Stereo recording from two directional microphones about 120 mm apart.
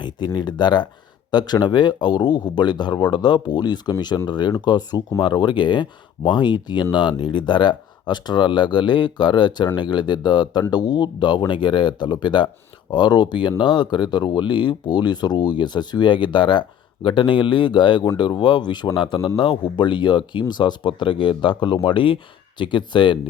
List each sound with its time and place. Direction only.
0.3 s speech: 40° left (ahead or behind)